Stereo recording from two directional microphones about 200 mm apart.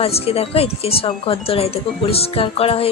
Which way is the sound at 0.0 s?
30° left (ahead or behind).